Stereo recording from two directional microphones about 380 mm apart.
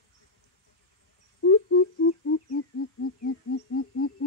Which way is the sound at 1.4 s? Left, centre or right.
Left.